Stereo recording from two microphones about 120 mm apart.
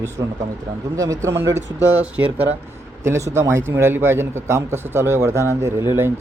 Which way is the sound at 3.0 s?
25° right (ahead or behind).